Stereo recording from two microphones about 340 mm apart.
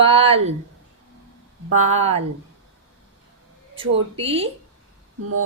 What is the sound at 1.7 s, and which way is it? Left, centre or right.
Speech, centre.